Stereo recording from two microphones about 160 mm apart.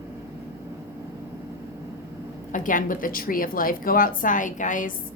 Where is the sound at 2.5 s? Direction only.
55° left (ahead or behind).